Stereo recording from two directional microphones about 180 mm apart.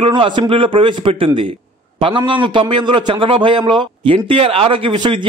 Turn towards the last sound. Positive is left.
turn(degrees=-25)  # may be behind; listen again after turning